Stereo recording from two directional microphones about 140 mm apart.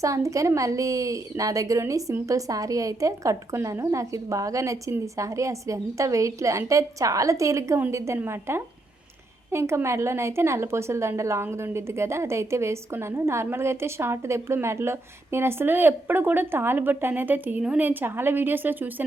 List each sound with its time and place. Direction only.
0.0 s a woman's voice: 20° right (ahead or behind)